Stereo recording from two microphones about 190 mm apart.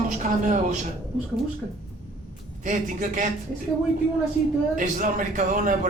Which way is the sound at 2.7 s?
45° right (ahead or behind).